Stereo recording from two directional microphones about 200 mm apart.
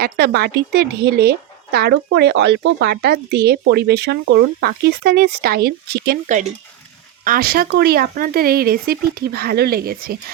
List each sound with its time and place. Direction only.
0.0 s speech: 55° right (ahead or behind)
7.3 s speech: 50° right (ahead or behind)